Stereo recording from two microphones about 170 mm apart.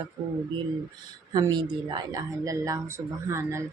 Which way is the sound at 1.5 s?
25° right (ahead or behind).